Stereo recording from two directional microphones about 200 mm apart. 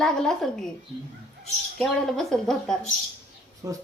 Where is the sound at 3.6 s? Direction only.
15° right (ahead or behind).